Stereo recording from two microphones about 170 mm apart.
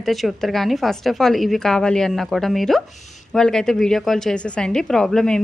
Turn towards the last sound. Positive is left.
turn(degrees=5)  # may be behind; listen again after turning